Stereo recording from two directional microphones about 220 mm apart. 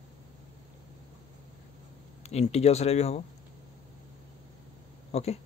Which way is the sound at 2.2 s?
30° left (ahead or behind).